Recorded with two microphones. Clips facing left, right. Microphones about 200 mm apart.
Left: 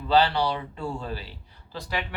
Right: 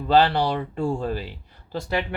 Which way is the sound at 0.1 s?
50° right (ahead or behind).